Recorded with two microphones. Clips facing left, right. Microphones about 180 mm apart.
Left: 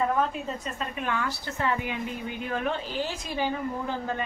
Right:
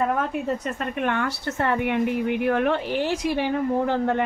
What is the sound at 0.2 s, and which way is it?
Speech, 60° right (ahead or behind).